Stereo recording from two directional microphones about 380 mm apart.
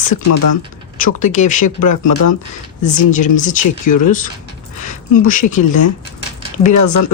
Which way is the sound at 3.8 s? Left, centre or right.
Left.